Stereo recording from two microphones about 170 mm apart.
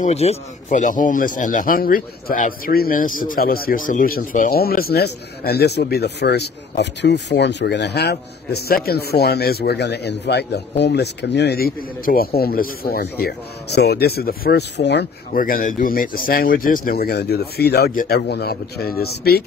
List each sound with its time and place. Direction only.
0.0 s speech: 40° left (ahead or behind); by 15.0 s 85° left
15.3 s speech: 55° left (ahead or behind)